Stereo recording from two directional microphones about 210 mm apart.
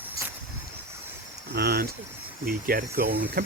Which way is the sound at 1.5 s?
50° right (ahead or behind).